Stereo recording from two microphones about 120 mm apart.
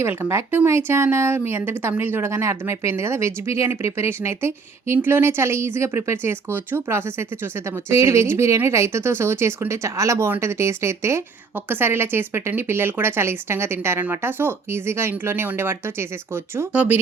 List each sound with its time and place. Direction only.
0.0 s speech: 20° right (ahead or behind)